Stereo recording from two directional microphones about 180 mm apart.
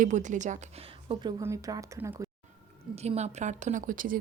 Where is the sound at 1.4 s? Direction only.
15° right (ahead or behind).